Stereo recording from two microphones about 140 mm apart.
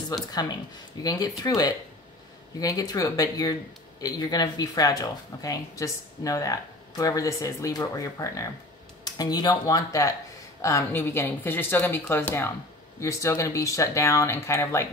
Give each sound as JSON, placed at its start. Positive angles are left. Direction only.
{"t": 0.1, "sound": "speech", "side_deg": 30}